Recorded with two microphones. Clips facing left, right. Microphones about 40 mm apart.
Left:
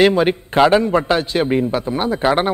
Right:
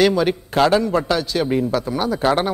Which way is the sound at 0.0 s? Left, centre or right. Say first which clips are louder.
Left 3 dB; left.